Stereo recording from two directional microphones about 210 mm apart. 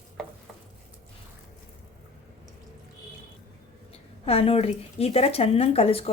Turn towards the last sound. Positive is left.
turn(degrees=25)  # may be behind; listen again after turning